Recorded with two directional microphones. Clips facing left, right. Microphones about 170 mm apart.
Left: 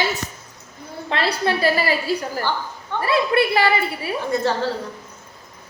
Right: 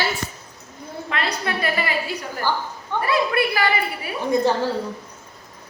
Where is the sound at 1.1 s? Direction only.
30° left (ahead or behind).